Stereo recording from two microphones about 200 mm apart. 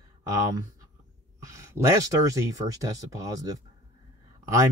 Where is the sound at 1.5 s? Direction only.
15° right (ahead or behind).